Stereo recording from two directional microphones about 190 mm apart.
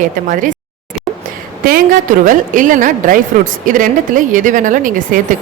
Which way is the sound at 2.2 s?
45° right (ahead or behind).